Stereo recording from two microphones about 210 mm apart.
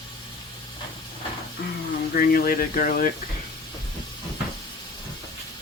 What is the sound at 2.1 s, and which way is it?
Speech, 45° left (ahead or behind).